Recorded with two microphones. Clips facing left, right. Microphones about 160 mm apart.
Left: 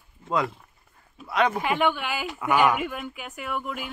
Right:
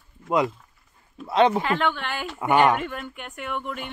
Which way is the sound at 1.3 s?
25° right (ahead or behind).